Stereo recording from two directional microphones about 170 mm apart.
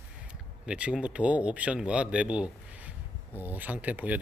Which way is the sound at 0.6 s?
5° right (ahead or behind).